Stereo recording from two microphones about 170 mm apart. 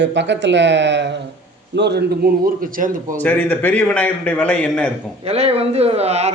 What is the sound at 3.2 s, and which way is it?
Speech, 10° left (ahead or behind).